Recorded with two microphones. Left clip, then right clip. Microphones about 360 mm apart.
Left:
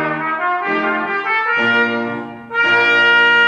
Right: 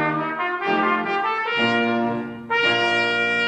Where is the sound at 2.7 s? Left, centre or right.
Left.